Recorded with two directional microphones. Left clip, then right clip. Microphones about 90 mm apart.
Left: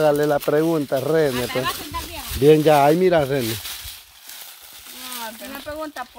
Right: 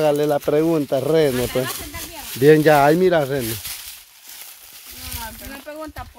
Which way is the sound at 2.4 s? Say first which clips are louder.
Right 1 dB; 40° right (ahead or behind).